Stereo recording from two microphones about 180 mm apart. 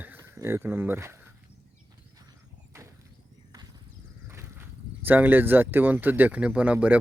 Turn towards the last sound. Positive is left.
turn(degrees=-10)  # may be behind; listen again after turning